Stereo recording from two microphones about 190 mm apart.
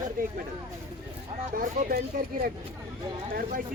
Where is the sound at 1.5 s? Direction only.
50° right (ahead or behind).